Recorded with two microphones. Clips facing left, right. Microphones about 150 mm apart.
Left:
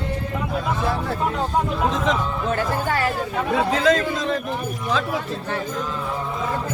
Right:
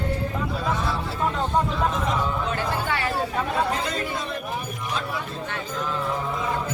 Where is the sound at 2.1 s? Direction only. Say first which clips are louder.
Left 4 dB; 90° left.